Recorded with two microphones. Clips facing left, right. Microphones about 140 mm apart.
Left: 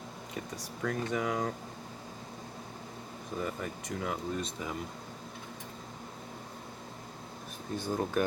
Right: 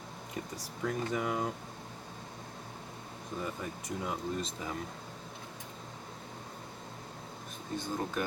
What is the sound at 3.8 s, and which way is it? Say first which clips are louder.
Speech: even; centre (ahead or behind).